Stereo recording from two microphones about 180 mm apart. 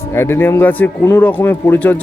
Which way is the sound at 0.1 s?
15° left (ahead or behind).